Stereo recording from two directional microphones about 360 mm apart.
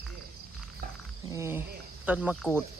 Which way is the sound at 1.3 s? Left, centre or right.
Centre.